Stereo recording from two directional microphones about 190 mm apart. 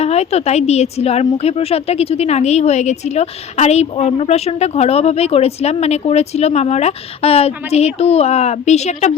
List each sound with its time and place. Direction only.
0.0 s a woman's voice: 35° left (ahead or behind)